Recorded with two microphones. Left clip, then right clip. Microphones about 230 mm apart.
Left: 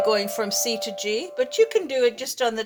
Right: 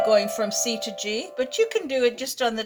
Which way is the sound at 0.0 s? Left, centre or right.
Left.